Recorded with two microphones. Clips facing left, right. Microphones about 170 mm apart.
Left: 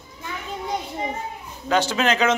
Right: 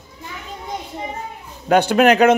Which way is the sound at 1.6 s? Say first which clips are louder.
Right 7 dB; 60° right (ahead or behind).